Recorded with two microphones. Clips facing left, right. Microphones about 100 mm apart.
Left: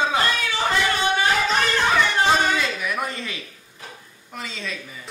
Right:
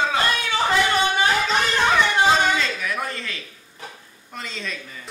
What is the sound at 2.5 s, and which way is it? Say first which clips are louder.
Speech: even; 15° left (ahead or behind).